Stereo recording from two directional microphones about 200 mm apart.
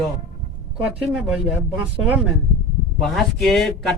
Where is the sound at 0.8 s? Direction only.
5° right (ahead or behind).